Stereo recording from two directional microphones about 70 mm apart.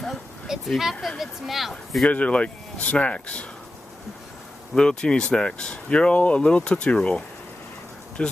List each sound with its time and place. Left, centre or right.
0.5 s speech: centre
2.0 s speech: centre
4.7 s speech: centre